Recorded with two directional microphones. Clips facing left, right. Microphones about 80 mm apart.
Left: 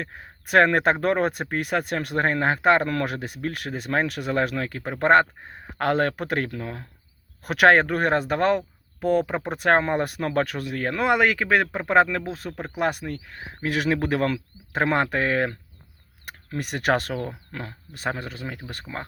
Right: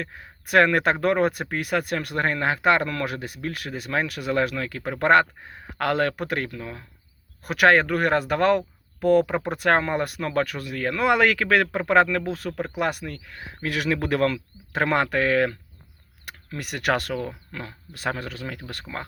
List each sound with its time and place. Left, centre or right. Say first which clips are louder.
0.0 s speech: even; left
11.1 s speech: even; centre